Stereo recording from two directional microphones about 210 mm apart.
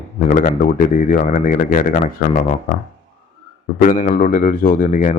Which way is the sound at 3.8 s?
35° left (ahead or behind).